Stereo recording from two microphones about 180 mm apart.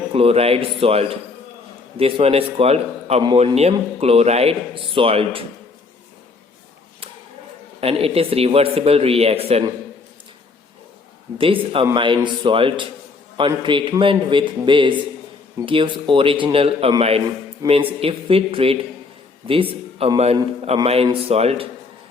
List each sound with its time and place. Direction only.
0.1 s a man's voice: 35° right (ahead or behind)
7.8 s a man's voice: 35° right (ahead or behind)
11.3 s a man's voice: 30° right (ahead or behind)
20.0 s a man's voice: 35° right (ahead or behind)